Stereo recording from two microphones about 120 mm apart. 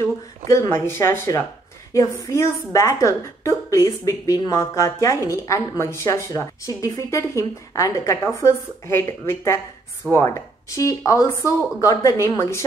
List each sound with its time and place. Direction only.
0.5 s a woman's voice: 25° left (ahead or behind)